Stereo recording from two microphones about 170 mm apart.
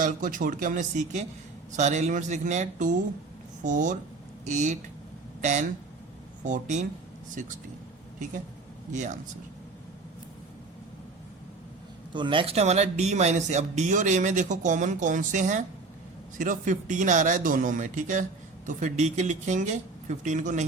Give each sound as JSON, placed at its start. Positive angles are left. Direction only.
{"t": 0.0, "sound": "speech", "side_deg": -50}
{"t": 8.9, "sound": "speech", "side_deg": -45}
{"t": 12.1, "sound": "speech", "side_deg": -30}